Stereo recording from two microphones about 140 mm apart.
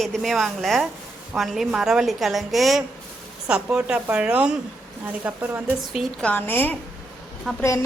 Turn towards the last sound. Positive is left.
turn(degrees=0)  # may be behind; listen again after turning